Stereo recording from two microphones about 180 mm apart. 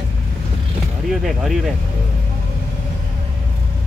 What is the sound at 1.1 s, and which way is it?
Speech, centre (ahead or behind).